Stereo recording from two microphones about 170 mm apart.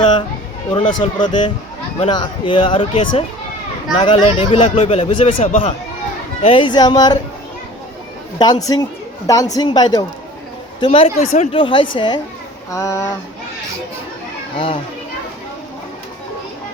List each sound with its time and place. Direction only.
0.7 s speech: 25° left (ahead or behind)
8.4 s speech: 25° left (ahead or behind)
12.7 s speech: 15° left (ahead or behind)